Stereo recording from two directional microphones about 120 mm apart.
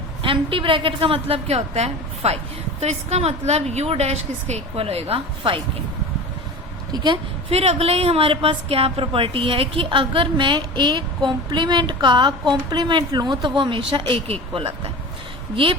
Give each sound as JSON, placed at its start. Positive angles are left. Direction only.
{"t": 0.2, "sound": "a woman's voice", "side_deg": -45}
{"t": 6.9, "sound": "a woman's voice", "side_deg": -40}
{"t": 7.5, "sound": "a woman's voice", "side_deg": -60}